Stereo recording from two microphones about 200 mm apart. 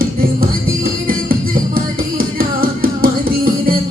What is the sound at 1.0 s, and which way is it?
Music, 45° right (ahead or behind).